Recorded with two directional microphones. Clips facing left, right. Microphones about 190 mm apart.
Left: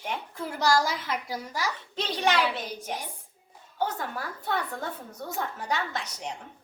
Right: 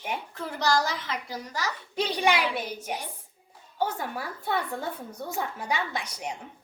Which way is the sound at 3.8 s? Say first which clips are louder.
Right 1 dB; 10° right (ahead or behind).